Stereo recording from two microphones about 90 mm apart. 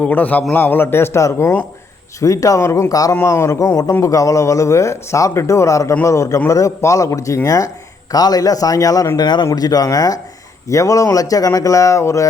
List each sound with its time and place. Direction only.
0.0 s a man's voice: 20° left (ahead or behind)
2.9 s a man's voice: 45° left (ahead or behind)
3.2 s a man's voice: 30° left (ahead or behind)